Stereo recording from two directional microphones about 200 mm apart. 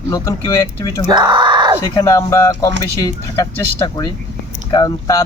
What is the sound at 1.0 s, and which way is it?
Speech, 25° right (ahead or behind).